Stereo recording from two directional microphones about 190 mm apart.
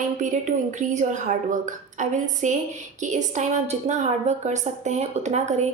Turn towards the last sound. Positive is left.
turn(degrees=-35)  # may be behind; listen again after turning